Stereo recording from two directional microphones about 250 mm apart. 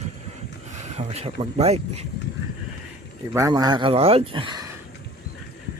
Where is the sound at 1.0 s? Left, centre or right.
Right.